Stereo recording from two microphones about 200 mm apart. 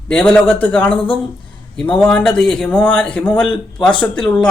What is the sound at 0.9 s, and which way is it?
Speech, 25° left (ahead or behind).